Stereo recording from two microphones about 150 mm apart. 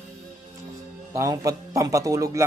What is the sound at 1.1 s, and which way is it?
A man's voice, 20° right (ahead or behind).